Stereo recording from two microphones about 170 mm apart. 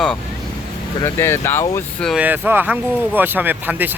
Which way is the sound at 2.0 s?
5° right (ahead or behind).